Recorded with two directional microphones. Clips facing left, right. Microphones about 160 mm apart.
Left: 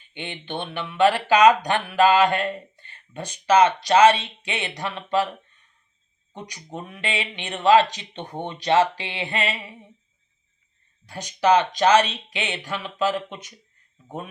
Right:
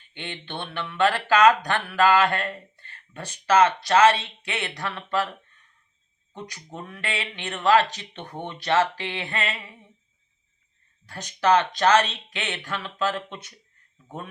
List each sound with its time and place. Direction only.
0.1 s speech: 15° left (ahead or behind)
6.3 s speech: 15° left (ahead or behind)
11.0 s speech: 15° left (ahead or behind)